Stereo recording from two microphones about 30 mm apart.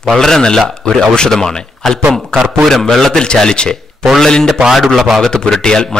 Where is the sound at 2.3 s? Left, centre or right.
Left.